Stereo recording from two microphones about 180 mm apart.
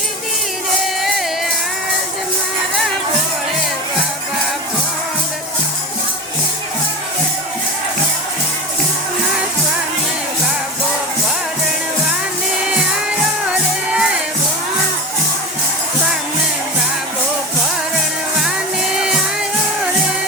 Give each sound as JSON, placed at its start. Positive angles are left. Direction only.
{"t": 13.5, "sound": "music", "side_deg": -5}